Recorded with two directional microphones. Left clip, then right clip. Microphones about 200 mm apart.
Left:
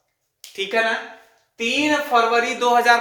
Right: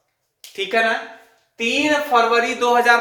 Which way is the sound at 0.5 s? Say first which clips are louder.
Right 2 dB; 10° left (ahead or behind).